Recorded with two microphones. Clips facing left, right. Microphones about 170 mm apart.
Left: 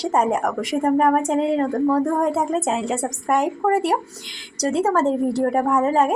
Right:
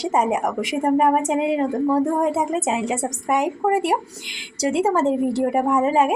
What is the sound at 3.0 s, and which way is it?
A woman's voice, 5° right (ahead or behind).